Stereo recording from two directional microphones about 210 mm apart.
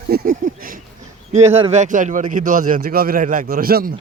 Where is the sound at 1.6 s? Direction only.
35° right (ahead or behind).